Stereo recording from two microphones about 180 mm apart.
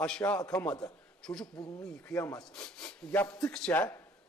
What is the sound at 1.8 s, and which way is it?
A man's voice, 5° left (ahead or behind).